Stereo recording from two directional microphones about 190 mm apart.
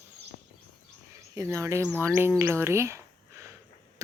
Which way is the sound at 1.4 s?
15° right (ahead or behind).